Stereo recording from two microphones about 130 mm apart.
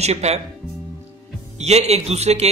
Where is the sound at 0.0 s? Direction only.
55° right (ahead or behind).